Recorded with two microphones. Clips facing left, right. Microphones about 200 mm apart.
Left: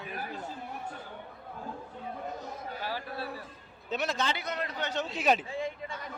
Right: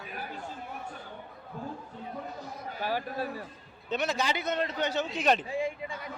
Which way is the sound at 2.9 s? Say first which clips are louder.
Right 6 dB; 45° right (ahead or behind).